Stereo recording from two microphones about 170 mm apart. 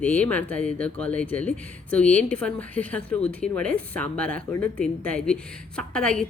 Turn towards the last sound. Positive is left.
turn(degrees=5)  # may be behind; listen again after turning